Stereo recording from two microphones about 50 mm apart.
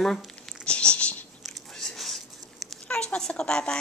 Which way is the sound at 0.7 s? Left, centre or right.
Left.